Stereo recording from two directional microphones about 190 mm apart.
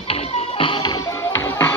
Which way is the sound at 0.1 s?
30° left (ahead or behind).